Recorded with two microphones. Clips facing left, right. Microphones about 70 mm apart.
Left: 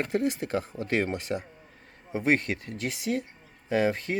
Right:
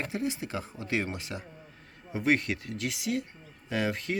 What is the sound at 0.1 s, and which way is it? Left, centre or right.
Speech, left.